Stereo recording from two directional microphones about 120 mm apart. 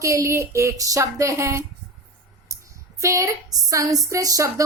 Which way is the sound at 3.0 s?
25° right (ahead or behind).